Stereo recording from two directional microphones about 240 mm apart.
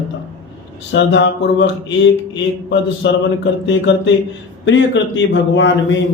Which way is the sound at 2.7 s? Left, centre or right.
Left.